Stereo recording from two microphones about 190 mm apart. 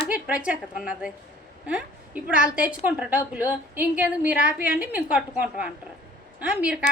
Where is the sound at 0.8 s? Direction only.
5° right (ahead or behind).